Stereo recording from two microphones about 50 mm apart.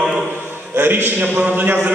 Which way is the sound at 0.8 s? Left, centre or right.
Right.